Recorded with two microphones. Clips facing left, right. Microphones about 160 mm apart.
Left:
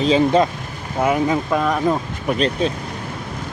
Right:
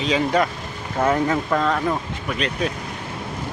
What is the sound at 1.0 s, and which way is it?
Speech, 10° left (ahead or behind).